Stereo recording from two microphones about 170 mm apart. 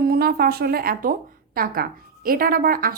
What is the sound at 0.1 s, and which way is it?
A woman's voice, 65° right (ahead or behind).